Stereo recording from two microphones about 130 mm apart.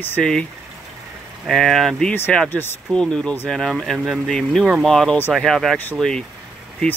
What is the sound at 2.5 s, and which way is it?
Speech, 15° left (ahead or behind).